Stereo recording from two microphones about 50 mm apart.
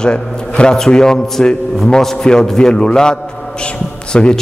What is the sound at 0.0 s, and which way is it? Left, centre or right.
A man's voice, centre.